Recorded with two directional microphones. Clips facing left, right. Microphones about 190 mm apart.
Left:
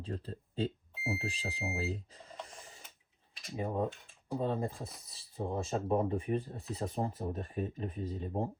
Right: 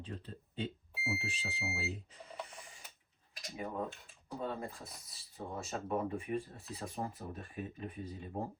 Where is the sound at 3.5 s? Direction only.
30° left (ahead or behind).